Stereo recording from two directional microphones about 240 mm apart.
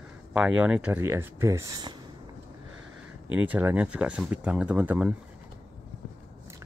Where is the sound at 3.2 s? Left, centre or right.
Centre.